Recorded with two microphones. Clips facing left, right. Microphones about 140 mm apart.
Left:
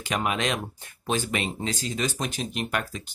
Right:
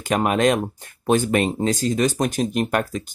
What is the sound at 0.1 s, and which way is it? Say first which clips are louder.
Speech: right 9 dB; 45° right (ahead or behind).